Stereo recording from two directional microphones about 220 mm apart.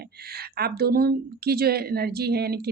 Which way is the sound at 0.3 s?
45° right (ahead or behind).